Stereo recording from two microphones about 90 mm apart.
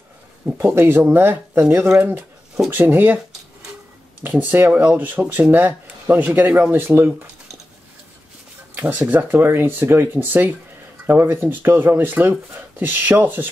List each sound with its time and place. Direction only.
0.6 s speech: 25° right (ahead or behind)
4.2 s speech: 20° right (ahead or behind)
9.0 s speech: 20° right (ahead or behind)